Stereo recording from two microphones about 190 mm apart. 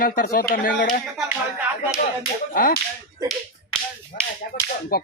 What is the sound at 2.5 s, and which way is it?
Speech, 50° left (ahead or behind).